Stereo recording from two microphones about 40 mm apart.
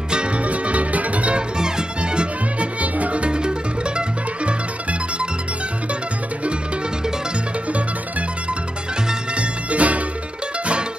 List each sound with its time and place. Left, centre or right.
0.1 s music: right
1.6 s music: right
9.3 s music: right